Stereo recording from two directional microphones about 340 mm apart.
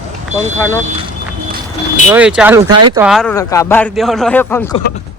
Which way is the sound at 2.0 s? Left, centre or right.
Centre.